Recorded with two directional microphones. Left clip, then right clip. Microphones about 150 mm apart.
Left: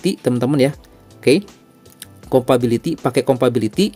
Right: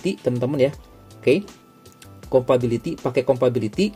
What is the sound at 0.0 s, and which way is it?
Speech, 45° left (ahead or behind).